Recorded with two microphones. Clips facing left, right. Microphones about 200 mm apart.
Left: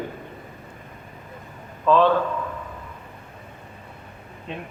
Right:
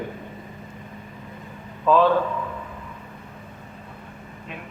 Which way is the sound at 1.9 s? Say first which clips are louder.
Even; 5° right (ahead or behind).